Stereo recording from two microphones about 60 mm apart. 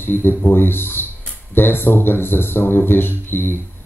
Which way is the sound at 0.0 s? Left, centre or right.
Left.